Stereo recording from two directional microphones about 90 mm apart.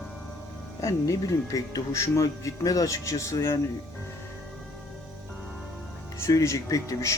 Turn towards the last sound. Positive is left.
turn(degrees=35)  # may be behind; listen again after turning